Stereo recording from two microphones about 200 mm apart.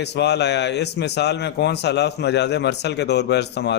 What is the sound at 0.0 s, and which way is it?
A man's voice, 55° left (ahead or behind).